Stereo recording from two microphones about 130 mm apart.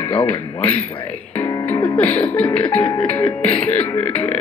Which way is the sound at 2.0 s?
10° left (ahead or behind).